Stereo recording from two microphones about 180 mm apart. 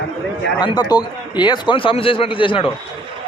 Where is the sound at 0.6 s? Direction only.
25° left (ahead or behind).